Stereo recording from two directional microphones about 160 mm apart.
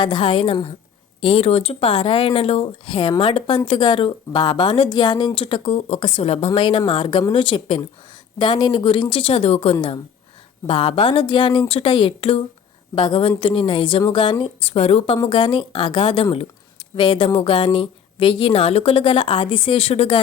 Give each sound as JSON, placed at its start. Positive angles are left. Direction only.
{"t": 0.0, "sound": "speech", "side_deg": 30}